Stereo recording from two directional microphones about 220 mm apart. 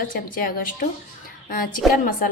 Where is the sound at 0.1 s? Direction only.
40° left (ahead or behind).